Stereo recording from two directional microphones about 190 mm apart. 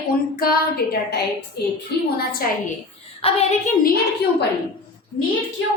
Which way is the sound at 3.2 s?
35° left (ahead or behind).